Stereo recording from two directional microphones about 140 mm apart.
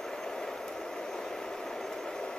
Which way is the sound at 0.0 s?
5° left (ahead or behind).